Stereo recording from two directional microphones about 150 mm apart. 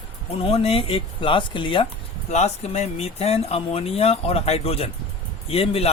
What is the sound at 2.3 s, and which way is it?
Speech, 45° left (ahead or behind).